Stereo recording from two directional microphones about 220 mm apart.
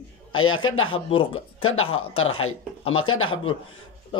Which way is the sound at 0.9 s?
25° left (ahead or behind).